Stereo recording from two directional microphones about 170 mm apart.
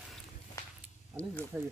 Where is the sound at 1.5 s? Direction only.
10° right (ahead or behind).